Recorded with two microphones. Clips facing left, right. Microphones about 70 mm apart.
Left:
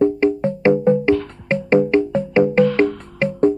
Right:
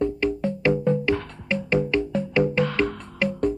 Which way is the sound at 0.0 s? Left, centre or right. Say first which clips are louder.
Left 8 dB; left.